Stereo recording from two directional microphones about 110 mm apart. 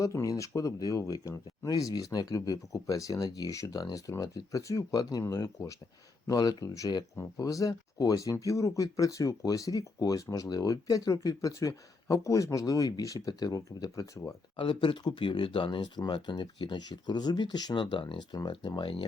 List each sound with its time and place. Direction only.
0.0 s speech: 30° left (ahead or behind)
14.5 s speech: 50° left (ahead or behind)